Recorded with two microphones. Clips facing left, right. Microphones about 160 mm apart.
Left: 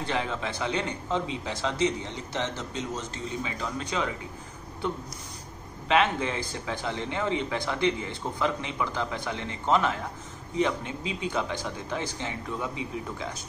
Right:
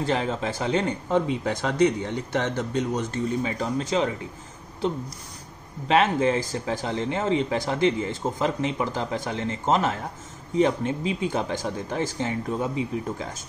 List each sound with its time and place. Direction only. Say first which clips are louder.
0.0 s speech: right 5 dB; 40° right (ahead or behind)
5.9 s speech: right 4 dB; 40° right (ahead or behind)
11.2 s speech: right 1 dB; 45° right (ahead or behind)
12.6 s speech: right 6 dB; 35° right (ahead or behind)